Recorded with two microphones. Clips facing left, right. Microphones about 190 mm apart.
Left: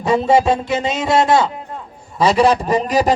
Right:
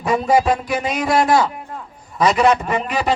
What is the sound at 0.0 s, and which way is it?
A man's voice, 25° left (ahead or behind).